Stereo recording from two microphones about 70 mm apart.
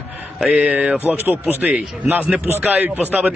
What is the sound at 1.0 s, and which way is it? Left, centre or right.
Speech, right.